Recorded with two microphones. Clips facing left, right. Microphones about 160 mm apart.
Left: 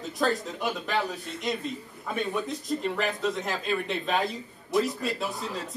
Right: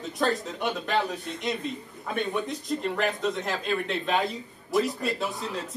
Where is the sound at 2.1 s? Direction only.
Centre (ahead or behind).